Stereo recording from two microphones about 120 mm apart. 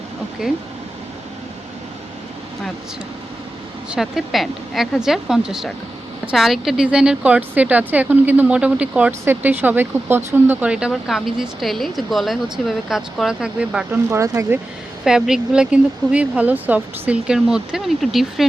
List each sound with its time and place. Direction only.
3.9 s speech: 5° right (ahead or behind)
14.1 s speech: 25° right (ahead or behind)
15.0 s speech: 5° right (ahead or behind)